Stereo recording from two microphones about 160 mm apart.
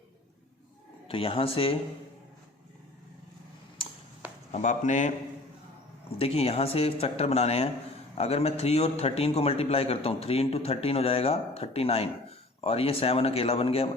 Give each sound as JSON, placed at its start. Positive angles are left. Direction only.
{"t": 1.0, "sound": "a man's voice", "side_deg": 35}
{"t": 3.8, "sound": "a sound", "side_deg": 35}
{"t": 4.5, "sound": "speech", "side_deg": 50}
{"t": 6.1, "sound": "a man's voice", "side_deg": 40}